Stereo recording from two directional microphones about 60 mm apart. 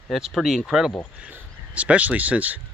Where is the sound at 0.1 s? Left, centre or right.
Centre.